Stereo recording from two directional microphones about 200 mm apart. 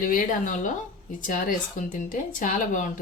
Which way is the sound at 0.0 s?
40° left (ahead or behind).